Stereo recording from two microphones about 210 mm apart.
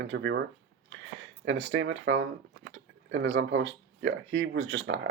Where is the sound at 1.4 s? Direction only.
60° right (ahead or behind).